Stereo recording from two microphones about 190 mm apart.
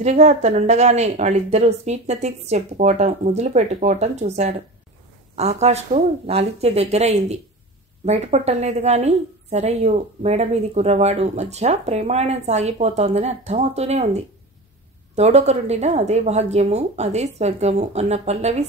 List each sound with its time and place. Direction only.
0.0 s a woman's voice: 40° right (ahead or behind)